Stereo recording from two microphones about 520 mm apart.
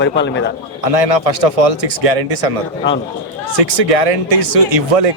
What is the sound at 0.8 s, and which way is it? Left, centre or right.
Speech, right.